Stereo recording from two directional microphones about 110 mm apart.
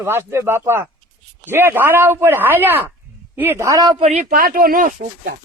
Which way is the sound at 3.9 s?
70° right (ahead or behind).